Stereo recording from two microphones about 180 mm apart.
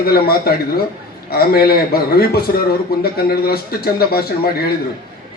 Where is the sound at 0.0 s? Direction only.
55° left (ahead or behind).